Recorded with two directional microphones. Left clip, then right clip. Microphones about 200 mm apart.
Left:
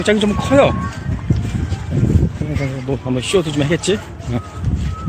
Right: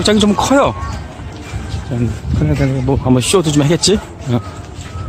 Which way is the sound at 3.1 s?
30° right (ahead or behind).